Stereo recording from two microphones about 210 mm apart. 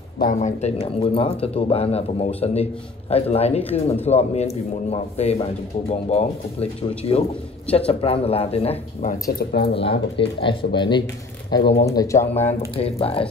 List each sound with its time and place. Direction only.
0.2 s speech: 35° left (ahead or behind)
9.4 s speech: 50° left (ahead or behind)
9.8 s speech: 25° left (ahead or behind)
12.4 s speech: 30° left (ahead or behind)